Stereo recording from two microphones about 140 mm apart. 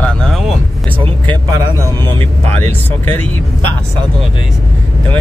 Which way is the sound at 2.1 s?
15° left (ahead or behind).